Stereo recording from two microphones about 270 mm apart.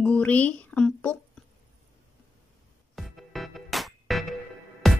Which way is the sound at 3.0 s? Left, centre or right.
Centre.